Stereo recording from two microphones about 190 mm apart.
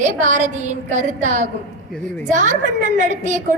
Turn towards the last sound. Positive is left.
turn(degrees=-40)  # may be behind; listen again after turning